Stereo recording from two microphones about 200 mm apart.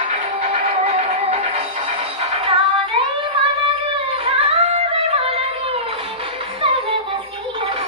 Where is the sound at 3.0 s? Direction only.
30° right (ahead or behind).